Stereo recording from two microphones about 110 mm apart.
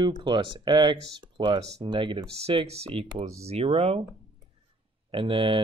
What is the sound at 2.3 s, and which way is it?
Speech, 65° right (ahead or behind).